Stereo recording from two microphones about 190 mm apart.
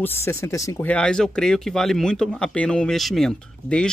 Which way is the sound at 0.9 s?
5° left (ahead or behind).